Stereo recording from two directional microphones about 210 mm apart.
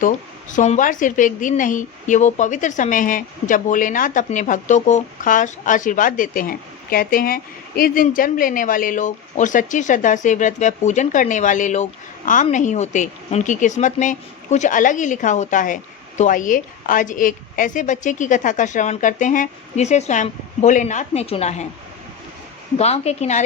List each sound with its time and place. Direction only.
0.5 s a woman's voice: 35° left (ahead or behind)
22.8 s a woman's voice: 30° left (ahead or behind)